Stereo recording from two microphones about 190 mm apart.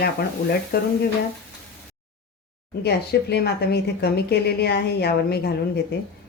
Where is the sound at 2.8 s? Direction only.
60° left (ahead or behind).